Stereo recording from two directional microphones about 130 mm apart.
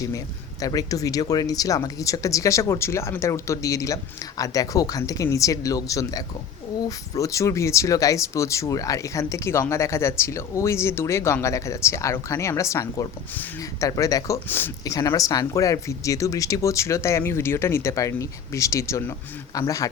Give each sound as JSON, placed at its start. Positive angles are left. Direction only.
{"t": 0.6, "sound": "speech", "side_deg": 30}